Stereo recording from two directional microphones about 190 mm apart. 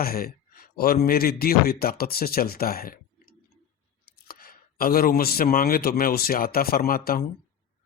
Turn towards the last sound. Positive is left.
turn(degrees=50)  # may be behind; listen again after turning